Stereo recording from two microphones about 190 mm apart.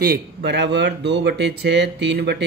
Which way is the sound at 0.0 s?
55° right (ahead or behind).